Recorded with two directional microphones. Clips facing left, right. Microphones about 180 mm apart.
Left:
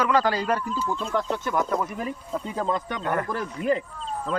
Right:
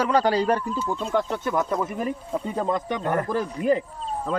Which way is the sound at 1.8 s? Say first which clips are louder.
Right 3 dB; 10° right (ahead or behind).